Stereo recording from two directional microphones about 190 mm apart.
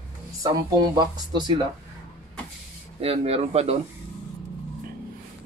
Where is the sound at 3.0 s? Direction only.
30° right (ahead or behind).